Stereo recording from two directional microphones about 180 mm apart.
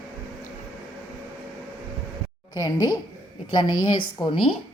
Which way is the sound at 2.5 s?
20° left (ahead or behind).